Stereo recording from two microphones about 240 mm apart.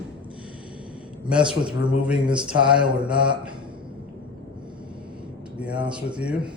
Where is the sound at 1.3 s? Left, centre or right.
Centre.